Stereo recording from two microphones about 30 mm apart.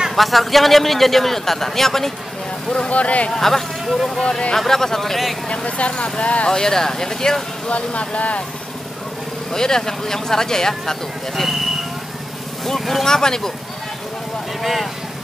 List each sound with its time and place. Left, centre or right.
0.1 s a man's voice: centre
2.9 s speech: left
3.3 s a man's voice: centre
3.9 s speech: centre
4.6 s a man's voice: centre
5.8 s speech: left
6.5 s speech: centre
7.7 s speech: left
9.5 s a man's voice: centre
12.6 s a man's voice: centre
13.0 s a man's voice: centre
14.6 s speech: centre